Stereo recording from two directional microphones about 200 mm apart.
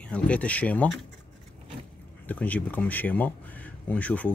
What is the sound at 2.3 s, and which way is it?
Speech, 5° left (ahead or behind).